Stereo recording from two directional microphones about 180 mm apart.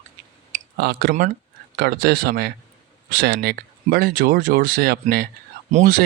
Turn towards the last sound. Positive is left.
turn(degrees=-55)  # may be behind; listen again after turning